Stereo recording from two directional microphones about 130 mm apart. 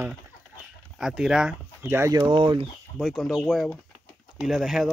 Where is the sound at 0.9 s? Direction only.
5° right (ahead or behind).